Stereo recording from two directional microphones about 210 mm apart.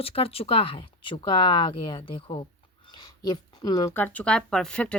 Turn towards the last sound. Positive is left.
turn(degrees=5)  # may be behind; listen again after turning